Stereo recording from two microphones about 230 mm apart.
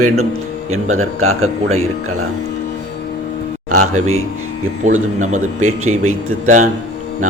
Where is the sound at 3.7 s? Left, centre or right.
Right.